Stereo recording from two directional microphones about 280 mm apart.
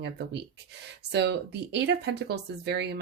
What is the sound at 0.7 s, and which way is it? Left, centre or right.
Speech, right.